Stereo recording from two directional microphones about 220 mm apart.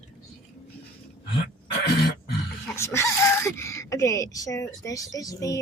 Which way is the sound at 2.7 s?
10° left (ahead or behind).